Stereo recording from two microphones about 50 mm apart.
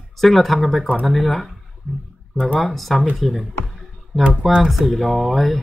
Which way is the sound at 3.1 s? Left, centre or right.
Centre.